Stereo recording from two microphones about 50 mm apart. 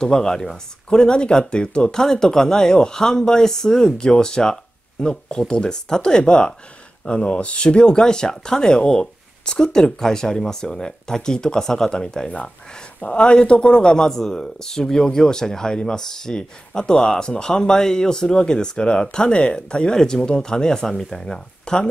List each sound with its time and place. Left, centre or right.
0.0 s a man's voice: centre